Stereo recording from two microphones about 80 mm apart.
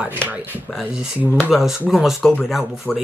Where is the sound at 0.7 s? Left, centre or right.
Centre.